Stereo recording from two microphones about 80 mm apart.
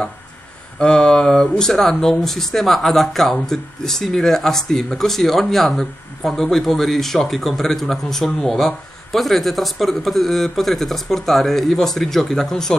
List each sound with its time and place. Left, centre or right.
0.7 s speech: centre